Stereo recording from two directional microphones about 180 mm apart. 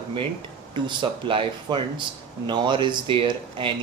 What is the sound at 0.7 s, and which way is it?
Speech, 30° right (ahead or behind).